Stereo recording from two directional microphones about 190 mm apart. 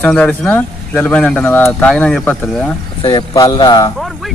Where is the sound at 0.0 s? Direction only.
5° left (ahead or behind).